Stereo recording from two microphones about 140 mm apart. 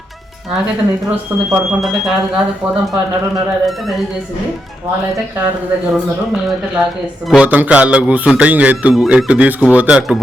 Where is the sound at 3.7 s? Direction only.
Centre (ahead or behind).